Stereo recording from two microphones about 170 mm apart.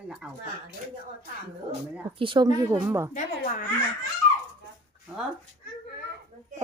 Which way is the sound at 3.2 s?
45° left (ahead or behind).